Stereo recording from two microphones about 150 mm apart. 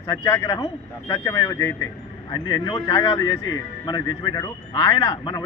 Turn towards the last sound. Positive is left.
turn(degrees=25)  # may be behind; listen again after turning